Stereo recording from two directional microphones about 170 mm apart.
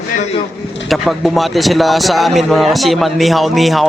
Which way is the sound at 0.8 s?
Centre (ahead or behind).